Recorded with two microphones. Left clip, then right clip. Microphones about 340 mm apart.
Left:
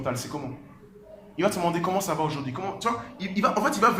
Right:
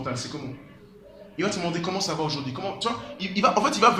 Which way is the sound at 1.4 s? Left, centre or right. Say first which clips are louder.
Left 3 dB; centre.